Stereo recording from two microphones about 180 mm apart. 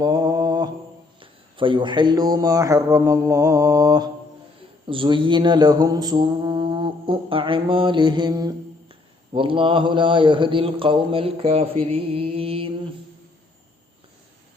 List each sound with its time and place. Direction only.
0.0 s mantra: 20° right (ahead or behind)